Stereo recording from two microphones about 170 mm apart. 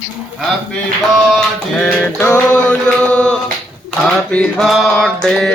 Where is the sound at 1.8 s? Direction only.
10° left (ahead or behind).